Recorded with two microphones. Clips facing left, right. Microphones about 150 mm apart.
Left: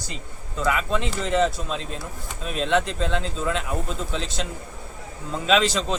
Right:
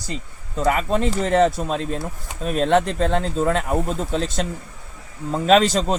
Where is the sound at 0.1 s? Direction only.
40° right (ahead or behind).